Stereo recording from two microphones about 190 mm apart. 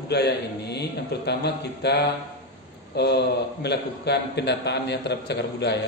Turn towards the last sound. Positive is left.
turn(degrees=60)  # may be behind; listen again after turning